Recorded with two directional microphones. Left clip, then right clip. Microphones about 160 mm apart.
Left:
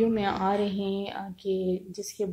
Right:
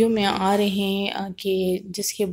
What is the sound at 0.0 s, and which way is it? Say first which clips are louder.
Speech: right 5 dB; 25° right (ahead or behind).